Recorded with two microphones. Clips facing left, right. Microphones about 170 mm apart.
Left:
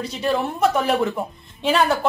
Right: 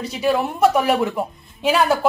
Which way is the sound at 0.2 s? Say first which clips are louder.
Right 3 dB; 5° right (ahead or behind).